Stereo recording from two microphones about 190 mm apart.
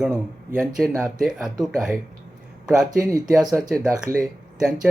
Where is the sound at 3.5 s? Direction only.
Centre (ahead or behind).